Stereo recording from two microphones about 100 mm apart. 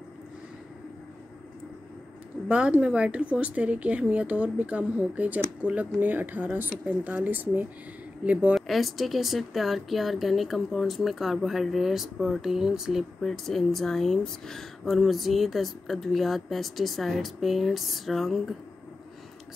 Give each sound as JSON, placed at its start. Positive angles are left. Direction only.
{"t": 2.4, "sound": "a woman's voice", "side_deg": -10}
{"t": 8.5, "sound": "speech", "side_deg": 0}